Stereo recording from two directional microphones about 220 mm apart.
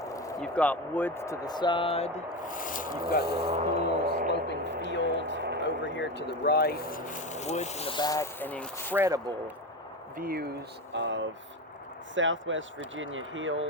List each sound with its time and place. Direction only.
0.0 s a sound: 15° left (ahead or behind)
0.3 s speech: 5° left (ahead or behind); by 5.0 s 55° left (ahead or behind)
5.1 s a sound: 55° left (ahead or behind)
5.6 s speech: 55° left (ahead or behind); by 9.0 s 5° left (ahead or behind)
9.0 s speech: 15° right (ahead or behind)
10.2 s speech: 40° right (ahead or behind)
10.9 s speech: 55° right (ahead or behind)